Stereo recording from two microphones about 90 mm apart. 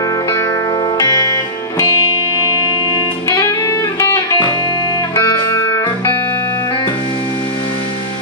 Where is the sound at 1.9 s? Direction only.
30° right (ahead or behind).